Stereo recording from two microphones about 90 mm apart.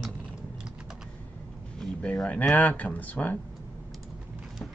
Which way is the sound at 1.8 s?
10° left (ahead or behind).